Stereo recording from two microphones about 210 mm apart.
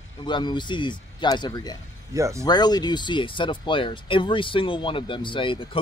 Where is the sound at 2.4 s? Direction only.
20° left (ahead or behind).